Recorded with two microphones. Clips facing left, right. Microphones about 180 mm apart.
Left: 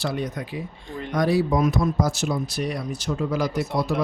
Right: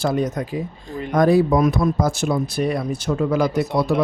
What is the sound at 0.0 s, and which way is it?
Speech, 45° right (ahead or behind).